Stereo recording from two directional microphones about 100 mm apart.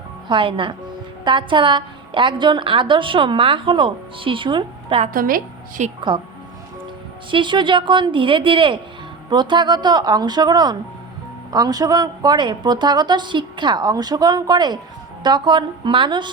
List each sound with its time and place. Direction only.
0.3 s a woman's voice: 55° right (ahead or behind)
6.1 s a woman's voice: 55° right (ahead or behind)
7.3 s a woman's voice: 55° right (ahead or behind)